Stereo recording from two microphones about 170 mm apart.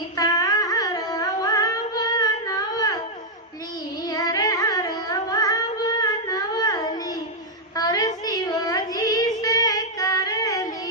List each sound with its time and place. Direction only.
0.2 s music: 20° left (ahead or behind)
4.1 s carnatic music: 20° left (ahead or behind)
7.8 s child singing: 20° left (ahead or behind)